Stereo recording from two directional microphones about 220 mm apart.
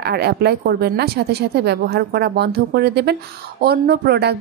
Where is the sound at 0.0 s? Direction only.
45° right (ahead or behind).